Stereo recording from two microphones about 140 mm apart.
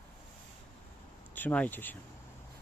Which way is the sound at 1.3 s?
10° left (ahead or behind).